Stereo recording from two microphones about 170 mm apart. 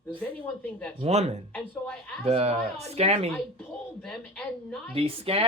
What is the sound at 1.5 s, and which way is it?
Speech, 5° left (ahead or behind).